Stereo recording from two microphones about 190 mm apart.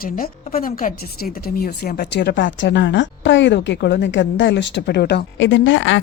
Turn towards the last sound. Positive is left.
turn(degrees=80)